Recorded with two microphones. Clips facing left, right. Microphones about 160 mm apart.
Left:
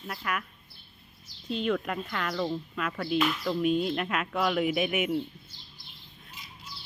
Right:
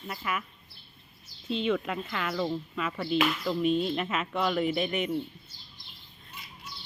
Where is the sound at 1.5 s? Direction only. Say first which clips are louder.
Even; centre (ahead or behind).